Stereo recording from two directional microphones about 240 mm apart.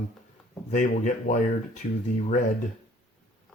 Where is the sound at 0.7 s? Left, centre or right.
Left.